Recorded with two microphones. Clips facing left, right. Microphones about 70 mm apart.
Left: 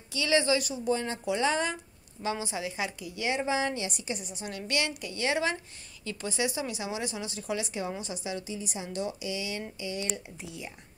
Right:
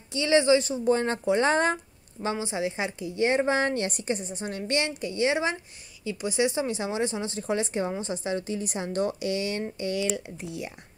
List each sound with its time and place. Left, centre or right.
0.1 s a woman's voice: right
2.2 s a woman's voice: right
3.3 s a woman's voice: right
8.5 s a woman's voice: right
9.9 s speech: right
10.3 s speech: right